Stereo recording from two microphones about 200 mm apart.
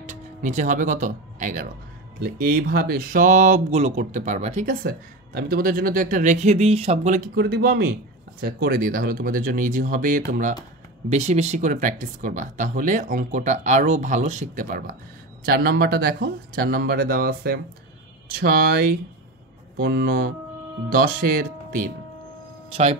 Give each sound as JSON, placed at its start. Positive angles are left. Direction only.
{"t": 0.0, "sound": "speech", "side_deg": -35}
{"t": 4.8, "sound": "speech", "side_deg": -50}
{"t": 7.3, "sound": "speech", "side_deg": -55}
{"t": 11.1, "sound": "speech", "side_deg": -35}
{"t": 22.7, "sound": "speech", "side_deg": -30}